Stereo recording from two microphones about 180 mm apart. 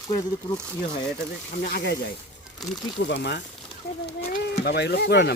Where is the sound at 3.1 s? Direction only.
70° left (ahead or behind).